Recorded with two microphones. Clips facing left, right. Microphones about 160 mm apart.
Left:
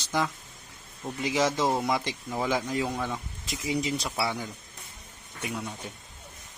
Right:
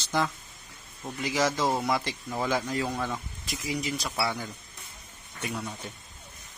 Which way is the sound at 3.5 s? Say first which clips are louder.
Left 3 dB; 25° left (ahead or behind).